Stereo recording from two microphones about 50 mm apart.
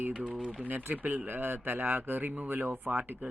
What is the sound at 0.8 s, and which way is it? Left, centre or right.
Speech, right.